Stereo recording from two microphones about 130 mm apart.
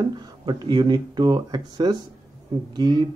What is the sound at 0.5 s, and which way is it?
Speech, 35° right (ahead or behind).